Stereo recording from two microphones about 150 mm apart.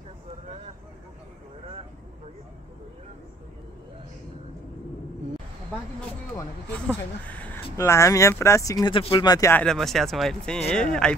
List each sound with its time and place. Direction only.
6.9 s a sound: 10° left (ahead or behind)
7.7 s speech: 20° left (ahead or behind)
9.5 s speech: 5° left (ahead or behind)